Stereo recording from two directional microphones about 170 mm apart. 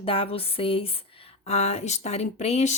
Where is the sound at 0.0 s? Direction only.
35° left (ahead or behind).